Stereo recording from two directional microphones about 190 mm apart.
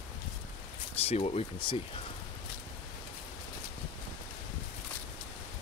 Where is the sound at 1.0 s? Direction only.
35° left (ahead or behind).